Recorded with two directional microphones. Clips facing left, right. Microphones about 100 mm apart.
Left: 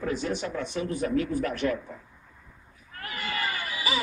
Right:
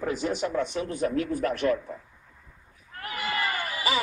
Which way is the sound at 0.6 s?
30° right (ahead or behind).